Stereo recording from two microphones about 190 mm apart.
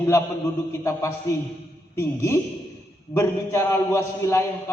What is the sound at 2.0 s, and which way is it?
A man's voice, 15° left (ahead or behind).